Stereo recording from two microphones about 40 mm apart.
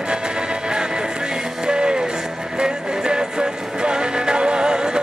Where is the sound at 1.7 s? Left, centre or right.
Right.